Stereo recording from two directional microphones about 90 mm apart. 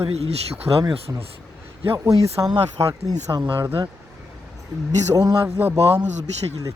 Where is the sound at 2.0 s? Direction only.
40° right (ahead or behind).